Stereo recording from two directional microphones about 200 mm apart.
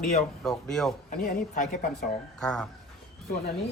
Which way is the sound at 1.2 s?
40° left (ahead or behind).